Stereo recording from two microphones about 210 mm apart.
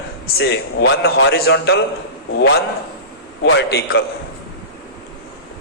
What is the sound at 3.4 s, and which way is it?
Speech, 50° left (ahead or behind).